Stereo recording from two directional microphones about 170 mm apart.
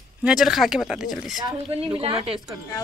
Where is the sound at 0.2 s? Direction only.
5° right (ahead or behind).